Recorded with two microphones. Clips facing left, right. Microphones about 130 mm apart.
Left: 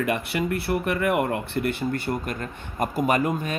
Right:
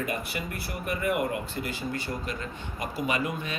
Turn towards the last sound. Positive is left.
turn(degrees=45)  # may be behind; listen again after turning